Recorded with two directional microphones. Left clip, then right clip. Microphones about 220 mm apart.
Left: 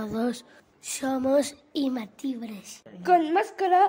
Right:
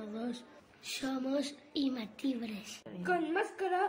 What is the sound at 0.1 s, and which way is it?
A woman's voice, 50° left (ahead or behind).